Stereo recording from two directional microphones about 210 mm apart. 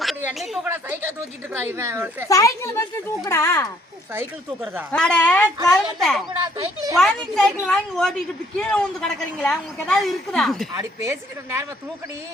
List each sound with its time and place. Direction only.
0.2 s a woman's voice: 5° right (ahead or behind)
2.3 s speech: 15° left (ahead or behind)
4.1 s a woman's voice: 10° right (ahead or behind)
4.9 s a woman's voice: 5° left (ahead or behind)
10.8 s a woman's voice: 10° right (ahead or behind)